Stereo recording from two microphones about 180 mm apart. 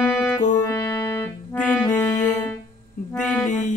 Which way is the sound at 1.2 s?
10° left (ahead or behind).